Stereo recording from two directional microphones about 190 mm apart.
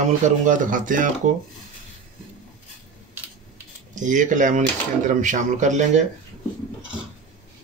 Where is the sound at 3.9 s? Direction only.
40° right (ahead or behind).